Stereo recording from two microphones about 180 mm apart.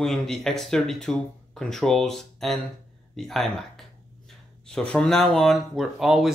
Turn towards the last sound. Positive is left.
turn(degrees=0)  # may be behind; listen again after turning